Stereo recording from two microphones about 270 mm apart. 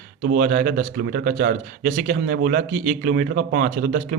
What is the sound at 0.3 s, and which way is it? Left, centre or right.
Speech, right.